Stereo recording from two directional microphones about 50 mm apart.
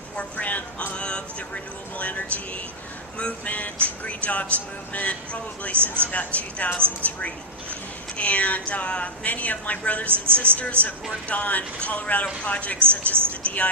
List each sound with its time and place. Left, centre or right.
0.3 s a sound: left
0.9 s speech: left
10.1 s speech: right
11.3 s speech: left
13.4 s vehicle: left